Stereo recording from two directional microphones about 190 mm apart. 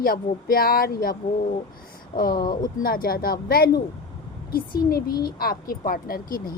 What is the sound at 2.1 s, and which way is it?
Speech, 50° left (ahead or behind).